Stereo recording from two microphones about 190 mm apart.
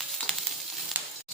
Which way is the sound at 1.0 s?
10° right (ahead or behind).